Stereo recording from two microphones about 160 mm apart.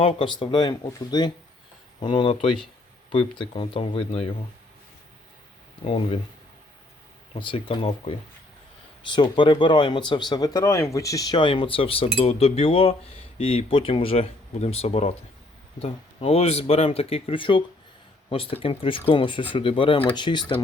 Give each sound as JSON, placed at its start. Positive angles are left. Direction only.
{"t": 0.0, "sound": "speech", "side_deg": 30}
{"t": 5.8, "sound": "speech", "side_deg": 35}
{"t": 7.3, "sound": "speech", "side_deg": 30}
{"t": 9.1, "sound": "speech", "side_deg": 30}